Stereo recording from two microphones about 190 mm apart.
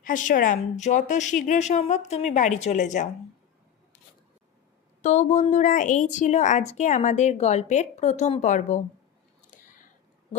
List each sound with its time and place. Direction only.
0.0 s a woman's voice: 45° left (ahead or behind)
5.0 s a woman's voice: 40° left (ahead or behind)